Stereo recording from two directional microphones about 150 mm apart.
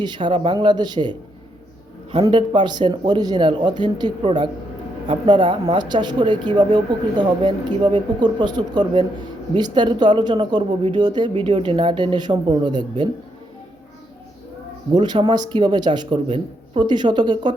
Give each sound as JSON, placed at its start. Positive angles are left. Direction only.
{"t": 0.0, "sound": "speech", "side_deg": -35}
{"t": 2.2, "sound": "speech", "side_deg": -30}
{"t": 14.9, "sound": "speech", "side_deg": -30}